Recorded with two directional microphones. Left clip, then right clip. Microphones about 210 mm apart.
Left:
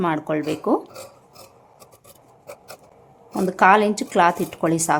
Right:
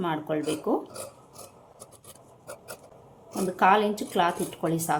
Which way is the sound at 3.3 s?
35° left (ahead or behind).